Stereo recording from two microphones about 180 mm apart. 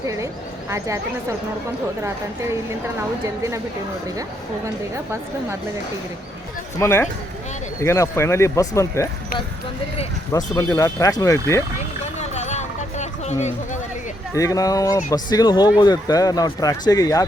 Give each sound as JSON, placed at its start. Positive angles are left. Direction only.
{"t": 2.0, "sound": "a woman's voice", "side_deg": -15}
{"t": 6.7, "sound": "speech", "side_deg": 15}
{"t": 10.3, "sound": "speech", "side_deg": 20}
{"t": 12.2, "sound": "a sound", "side_deg": 40}
{"t": 14.3, "sound": "speech", "side_deg": 20}